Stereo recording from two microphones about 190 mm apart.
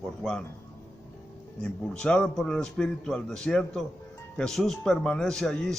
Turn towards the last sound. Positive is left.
turn(degrees=5)  # may be behind; listen again after turning